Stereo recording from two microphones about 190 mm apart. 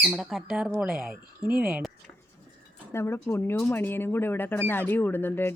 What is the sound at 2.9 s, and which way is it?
Speech, 15° left (ahead or behind).